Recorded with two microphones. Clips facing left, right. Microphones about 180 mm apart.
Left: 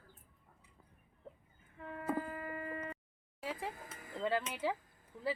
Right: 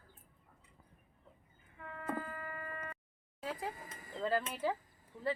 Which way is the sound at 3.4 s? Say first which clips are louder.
Right 1 dB; centre (ahead or behind).